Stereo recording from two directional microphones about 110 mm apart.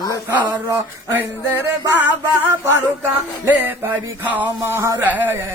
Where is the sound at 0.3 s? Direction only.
20° right (ahead or behind).